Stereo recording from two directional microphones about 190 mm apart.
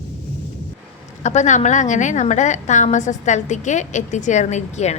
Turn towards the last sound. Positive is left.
turn(degrees=40)  # may be behind; listen again after turning